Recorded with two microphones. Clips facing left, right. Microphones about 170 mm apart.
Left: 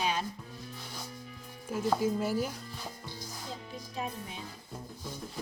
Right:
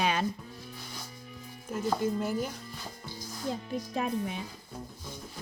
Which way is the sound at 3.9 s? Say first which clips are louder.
Right 6 dB; 65° right (ahead or behind).